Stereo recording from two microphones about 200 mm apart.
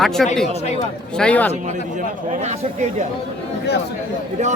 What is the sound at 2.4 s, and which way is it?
Speech, 35° right (ahead or behind).